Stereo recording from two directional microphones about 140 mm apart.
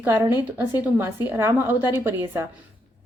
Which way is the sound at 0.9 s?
15° right (ahead or behind).